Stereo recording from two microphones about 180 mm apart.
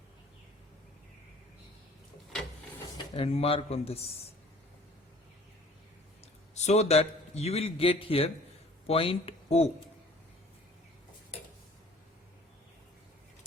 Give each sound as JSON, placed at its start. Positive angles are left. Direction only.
{"t": 3.2, "sound": "a man's voice", "side_deg": 30}
{"t": 6.5, "sound": "a man's voice", "side_deg": 40}